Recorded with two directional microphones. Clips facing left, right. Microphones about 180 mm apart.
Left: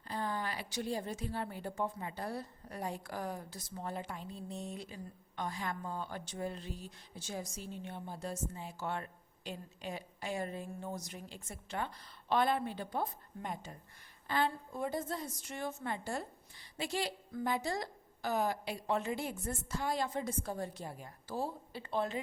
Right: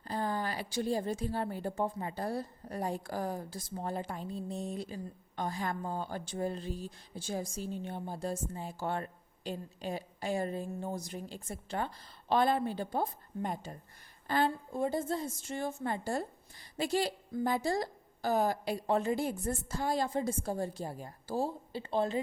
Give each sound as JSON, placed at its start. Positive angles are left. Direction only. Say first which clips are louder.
{"t": 0.1, "sound": "a woman's voice", "louder": "right 4 dB", "side_deg": -35}
{"t": 14.7, "sound": "a woman's voice", "louder": "right 5 dB", "side_deg": -25}